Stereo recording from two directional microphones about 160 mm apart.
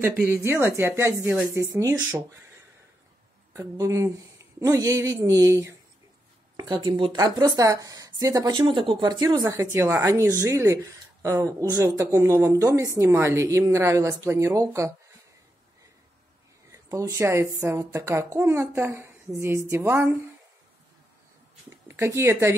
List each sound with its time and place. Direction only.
0.3 s a woman's voice: 15° right (ahead or behind)
3.5 s speech: 20° right (ahead or behind)
16.7 s a woman's voice: 20° right (ahead or behind)
21.6 s speech: 15° right (ahead or behind)